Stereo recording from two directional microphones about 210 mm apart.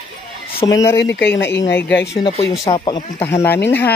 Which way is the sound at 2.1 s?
20° left (ahead or behind).